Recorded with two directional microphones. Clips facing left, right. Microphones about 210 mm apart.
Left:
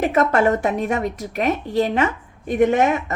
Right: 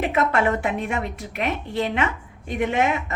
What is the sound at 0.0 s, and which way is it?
A woman's voice, 40° left (ahead or behind).